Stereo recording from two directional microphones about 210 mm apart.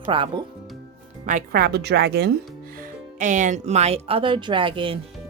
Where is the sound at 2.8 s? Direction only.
35° right (ahead or behind).